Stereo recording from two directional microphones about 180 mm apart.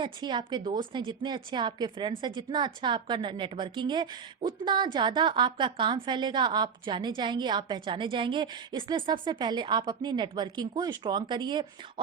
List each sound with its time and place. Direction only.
0.0 s a woman's voice: 25° right (ahead or behind)